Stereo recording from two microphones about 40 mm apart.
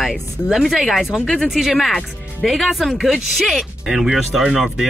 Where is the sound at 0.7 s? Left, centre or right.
Centre.